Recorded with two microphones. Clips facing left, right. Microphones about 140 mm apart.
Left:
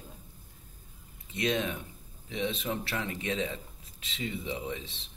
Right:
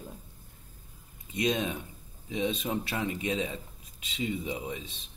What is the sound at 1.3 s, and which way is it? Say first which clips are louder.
Speech: right 1 dB; 15° right (ahead or behind).